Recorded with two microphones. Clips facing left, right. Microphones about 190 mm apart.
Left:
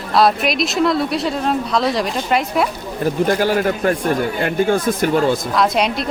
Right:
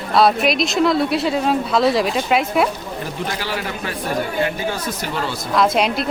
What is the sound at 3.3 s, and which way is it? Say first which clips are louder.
Speech: left 9 dB; 50° left (ahead or behind).